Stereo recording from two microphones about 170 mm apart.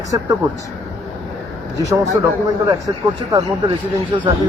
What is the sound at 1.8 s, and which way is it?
Speech, 20° right (ahead or behind).